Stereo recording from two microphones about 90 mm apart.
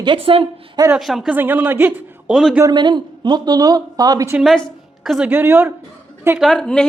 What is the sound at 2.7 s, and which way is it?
A man's voice, 55° right (ahead or behind).